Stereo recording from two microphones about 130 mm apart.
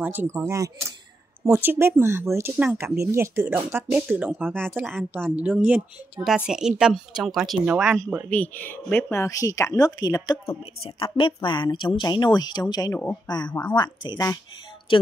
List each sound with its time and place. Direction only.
0.0 s a woman's voice: 15° right (ahead or behind)
8.3 s speech: 15° left (ahead or behind)
10.8 s a woman's voice: 40° left (ahead or behind)